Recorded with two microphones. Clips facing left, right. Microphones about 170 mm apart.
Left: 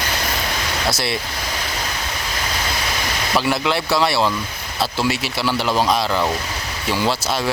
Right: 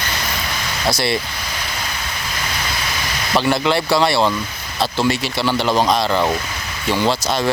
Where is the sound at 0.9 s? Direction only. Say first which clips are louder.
Right 5 dB; centre (ahead or behind).